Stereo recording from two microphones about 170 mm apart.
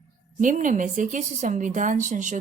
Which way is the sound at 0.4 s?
50° right (ahead or behind).